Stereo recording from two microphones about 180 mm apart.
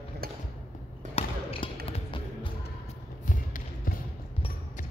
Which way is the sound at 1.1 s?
30° left (ahead or behind).